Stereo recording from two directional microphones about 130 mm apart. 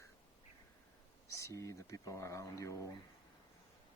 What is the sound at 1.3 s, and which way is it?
Speech, 20° left (ahead or behind).